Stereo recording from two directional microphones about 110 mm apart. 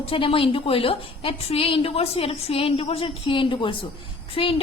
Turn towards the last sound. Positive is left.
turn(degrees=55)  # may be behind; listen again after turning